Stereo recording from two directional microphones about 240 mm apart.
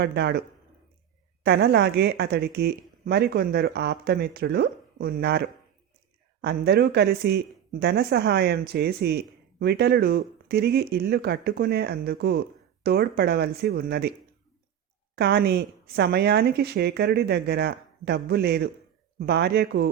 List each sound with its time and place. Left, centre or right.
0.0 s a woman's voice: right
1.5 s speech: right
15.1 s a woman's voice: right